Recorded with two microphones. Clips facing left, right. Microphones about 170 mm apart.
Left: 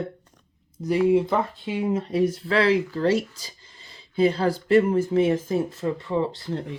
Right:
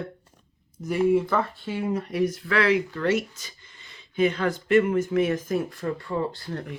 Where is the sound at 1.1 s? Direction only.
20° left (ahead or behind).